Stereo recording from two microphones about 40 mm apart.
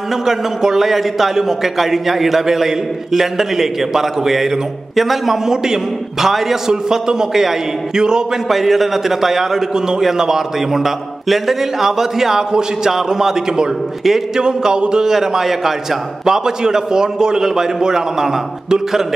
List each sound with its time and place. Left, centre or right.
0.1 s a man's voice: centre
6.7 s a man's voice: centre
8.5 s a man's voice: centre
14.4 s a man's voice: right